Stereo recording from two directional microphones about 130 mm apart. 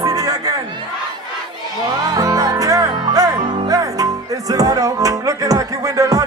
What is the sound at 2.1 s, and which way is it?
Music, 25° right (ahead or behind).